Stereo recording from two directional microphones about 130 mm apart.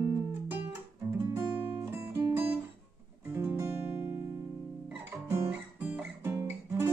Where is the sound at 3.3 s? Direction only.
20° right (ahead or behind).